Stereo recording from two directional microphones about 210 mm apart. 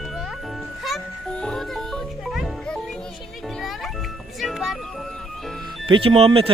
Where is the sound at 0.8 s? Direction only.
Centre (ahead or behind).